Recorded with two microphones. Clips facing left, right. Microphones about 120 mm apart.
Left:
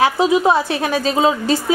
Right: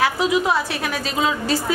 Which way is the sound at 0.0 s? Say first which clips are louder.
Left 5 dB; 30° left (ahead or behind).